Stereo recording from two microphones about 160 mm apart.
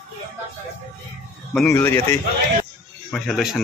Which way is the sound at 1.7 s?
15° left (ahead or behind).